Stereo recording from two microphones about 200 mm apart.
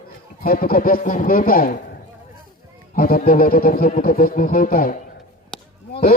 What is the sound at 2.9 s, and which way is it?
Speech, 45° left (ahead or behind).